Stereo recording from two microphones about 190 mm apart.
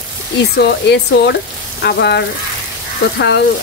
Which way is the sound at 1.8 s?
60° left (ahead or behind).